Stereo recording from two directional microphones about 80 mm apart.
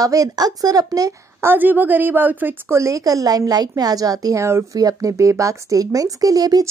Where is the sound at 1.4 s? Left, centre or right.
Right.